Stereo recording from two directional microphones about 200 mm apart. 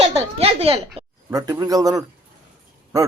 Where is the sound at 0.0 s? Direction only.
30° right (ahead or behind).